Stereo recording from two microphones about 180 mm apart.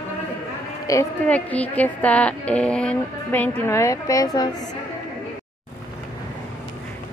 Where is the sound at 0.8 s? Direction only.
20° left (ahead or behind).